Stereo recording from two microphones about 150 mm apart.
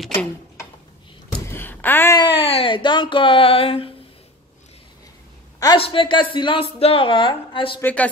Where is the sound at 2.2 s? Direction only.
40° left (ahead or behind).